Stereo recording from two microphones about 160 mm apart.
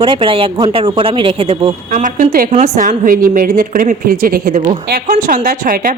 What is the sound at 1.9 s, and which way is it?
Speech, 55° right (ahead or behind).